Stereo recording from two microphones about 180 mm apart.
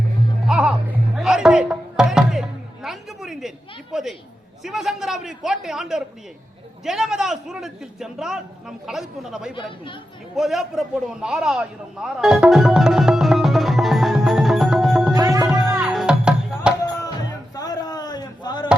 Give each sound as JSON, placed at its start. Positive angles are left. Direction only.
{"t": 0.4, "sound": "music", "side_deg": -5}
{"t": 3.9, "sound": "a man's voice", "side_deg": 0}
{"t": 10.3, "sound": "a sound", "side_deg": 0}
{"t": 15.1, "sound": "music", "side_deg": -20}
{"t": 15.6, "sound": "music", "side_deg": 0}
{"t": 17.5, "sound": "a sound", "side_deg": 20}